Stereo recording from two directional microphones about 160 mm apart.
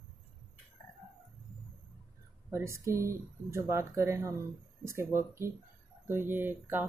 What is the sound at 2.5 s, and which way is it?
Speech, 15° right (ahead or behind).